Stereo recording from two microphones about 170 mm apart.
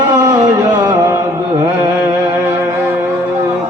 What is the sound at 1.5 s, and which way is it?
Carnatic music, 15° right (ahead or behind).